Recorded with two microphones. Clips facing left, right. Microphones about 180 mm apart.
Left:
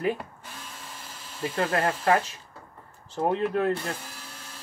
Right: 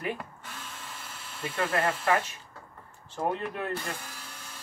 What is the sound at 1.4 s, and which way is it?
Speech, 35° left (ahead or behind).